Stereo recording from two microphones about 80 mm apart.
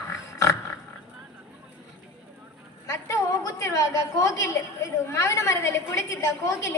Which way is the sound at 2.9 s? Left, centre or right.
Left.